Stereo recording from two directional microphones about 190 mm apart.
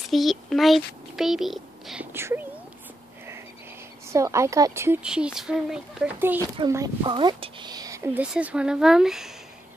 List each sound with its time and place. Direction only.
0.1 s a child's voice: centre (ahead or behind)
2.1 s speech: 10° right (ahead or behind)
4.1 s speech: 15° right (ahead or behind)
5.0 s speech: 5° right (ahead or behind)
6.6 s speech: 20° right (ahead or behind); by 9.3 s centre (ahead or behind)